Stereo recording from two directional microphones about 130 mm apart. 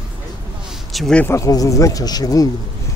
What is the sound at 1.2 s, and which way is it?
Speech, 25° left (ahead or behind).